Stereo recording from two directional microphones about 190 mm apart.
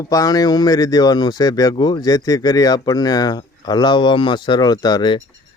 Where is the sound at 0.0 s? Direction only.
20° left (ahead or behind).